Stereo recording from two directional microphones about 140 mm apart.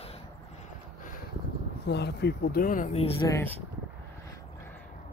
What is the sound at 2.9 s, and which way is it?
Speech, 40° left (ahead or behind).